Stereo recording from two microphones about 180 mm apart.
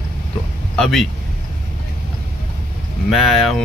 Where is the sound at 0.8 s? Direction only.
Centre (ahead or behind).